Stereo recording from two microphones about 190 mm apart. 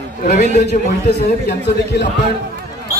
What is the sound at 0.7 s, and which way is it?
Speech, 40° left (ahead or behind).